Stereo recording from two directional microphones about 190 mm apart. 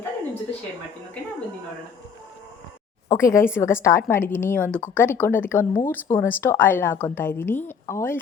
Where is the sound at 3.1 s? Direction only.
15° left (ahead or behind).